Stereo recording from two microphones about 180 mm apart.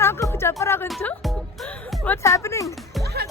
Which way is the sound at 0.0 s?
15° left (ahead or behind).